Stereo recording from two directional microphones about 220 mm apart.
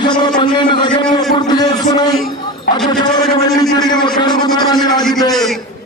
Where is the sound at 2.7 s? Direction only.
40° left (ahead or behind).